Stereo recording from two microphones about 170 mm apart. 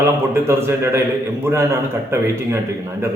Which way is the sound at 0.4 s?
15° right (ahead or behind).